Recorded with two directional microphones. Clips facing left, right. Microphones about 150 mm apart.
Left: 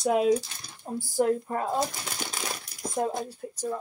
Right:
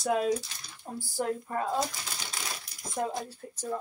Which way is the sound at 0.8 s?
30° left (ahead or behind).